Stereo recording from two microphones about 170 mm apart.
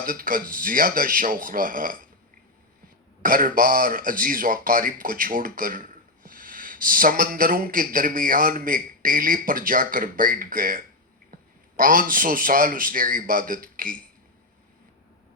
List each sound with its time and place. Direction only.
0.0 s a man's voice: 55° right (ahead or behind)
3.2 s a man's voice: 55° right (ahead or behind)